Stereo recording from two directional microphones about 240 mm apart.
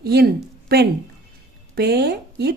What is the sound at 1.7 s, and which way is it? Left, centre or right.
Speech, right.